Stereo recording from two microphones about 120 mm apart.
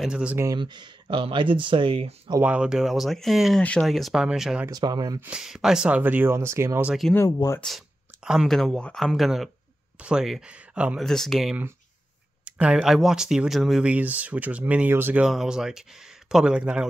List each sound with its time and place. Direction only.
0.0 s speech: 10° right (ahead or behind)
0.6 s speech: 40° right (ahead or behind)
2.4 s speech: 10° right (ahead or behind)
4.6 s speech: 35° right (ahead or behind)
5.2 s speech: 5° right (ahead or behind); by 6.9 s 20° right (ahead or behind)
6.9 s speech: centre (ahead or behind)
7.2 s speech: 30° left (ahead or behind)
7.6 s speech: centre (ahead or behind)
11.0 s speech: 5° left (ahead or behind)
12.4 s speech: 10° right (ahead or behind)
15.2 s speech: 5° right (ahead or behind)